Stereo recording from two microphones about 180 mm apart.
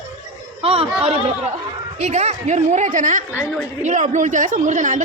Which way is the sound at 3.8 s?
45° right (ahead or behind).